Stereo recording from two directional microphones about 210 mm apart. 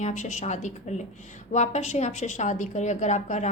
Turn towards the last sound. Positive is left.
turn(degrees=35)  # may be behind; listen again after turning